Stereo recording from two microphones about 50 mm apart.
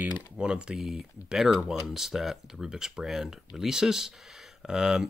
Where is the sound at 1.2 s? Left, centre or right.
Centre.